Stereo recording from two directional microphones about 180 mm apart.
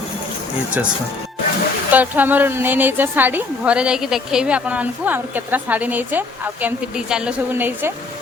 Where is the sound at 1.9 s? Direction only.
10° right (ahead or behind).